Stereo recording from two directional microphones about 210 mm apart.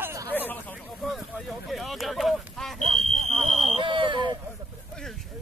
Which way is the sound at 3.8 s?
20° right (ahead or behind).